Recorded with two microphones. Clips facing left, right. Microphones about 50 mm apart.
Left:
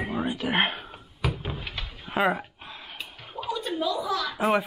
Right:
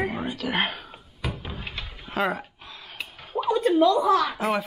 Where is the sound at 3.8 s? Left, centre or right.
Right.